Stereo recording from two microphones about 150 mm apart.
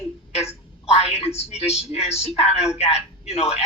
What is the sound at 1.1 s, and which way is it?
Speech, 45° left (ahead or behind).